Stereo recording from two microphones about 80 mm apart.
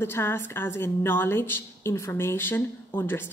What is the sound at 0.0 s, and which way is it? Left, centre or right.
A woman's voice, left.